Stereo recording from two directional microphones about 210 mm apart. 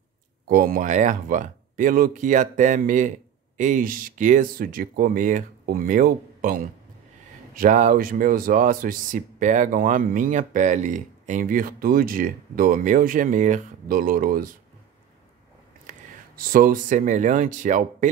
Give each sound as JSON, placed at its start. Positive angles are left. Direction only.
{"t": 0.5, "sound": "speech", "side_deg": -45}
{"t": 15.9, "sound": "speech", "side_deg": -40}